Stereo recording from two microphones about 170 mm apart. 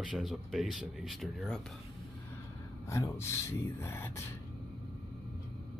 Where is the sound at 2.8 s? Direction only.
15° left (ahead or behind).